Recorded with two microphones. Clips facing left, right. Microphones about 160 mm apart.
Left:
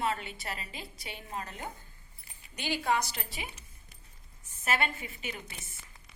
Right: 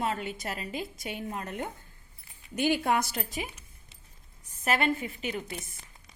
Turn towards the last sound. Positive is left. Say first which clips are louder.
# right 7 dB
turn(degrees=-40)  # may be behind; listen again after turning